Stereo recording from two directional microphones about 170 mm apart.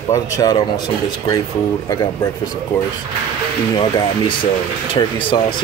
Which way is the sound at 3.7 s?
25° left (ahead or behind).